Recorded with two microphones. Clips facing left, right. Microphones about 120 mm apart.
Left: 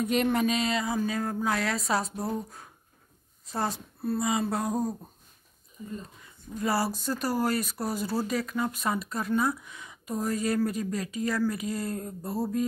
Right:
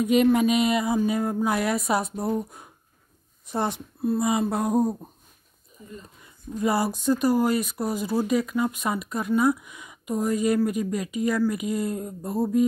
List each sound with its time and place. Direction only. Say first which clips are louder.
0.0 s a woman's voice: right 6 dB; 5° right (ahead or behind)
6.6 s speech: right 4 dB; 20° right (ahead or behind)